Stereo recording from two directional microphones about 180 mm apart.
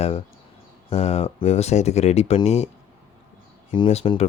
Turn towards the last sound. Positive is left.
turn(degrees=35)  # may be behind; listen again after turning